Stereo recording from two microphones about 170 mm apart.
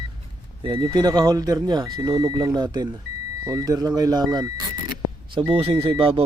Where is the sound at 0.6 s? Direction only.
30° right (ahead or behind).